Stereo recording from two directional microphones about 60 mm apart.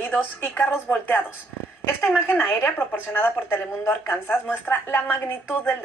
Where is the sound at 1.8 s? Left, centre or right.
Left.